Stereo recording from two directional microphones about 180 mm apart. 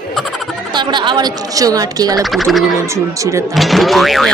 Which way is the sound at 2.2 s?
Centre (ahead or behind).